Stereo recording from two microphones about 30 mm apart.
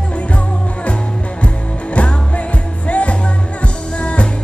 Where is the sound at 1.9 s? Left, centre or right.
Left.